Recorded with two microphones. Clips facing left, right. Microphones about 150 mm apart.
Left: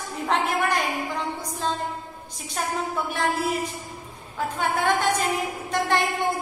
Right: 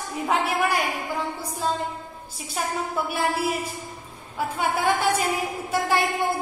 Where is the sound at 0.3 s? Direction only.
10° right (ahead or behind).